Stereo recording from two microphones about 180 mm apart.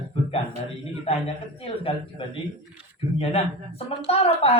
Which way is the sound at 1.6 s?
30° left (ahead or behind).